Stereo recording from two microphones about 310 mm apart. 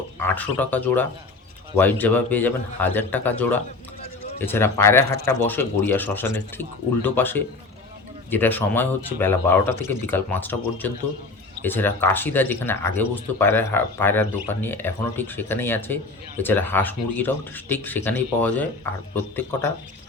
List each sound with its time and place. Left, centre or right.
0.2 s a man's voice: centre